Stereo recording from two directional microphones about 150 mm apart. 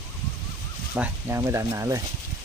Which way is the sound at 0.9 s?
15° right (ahead or behind).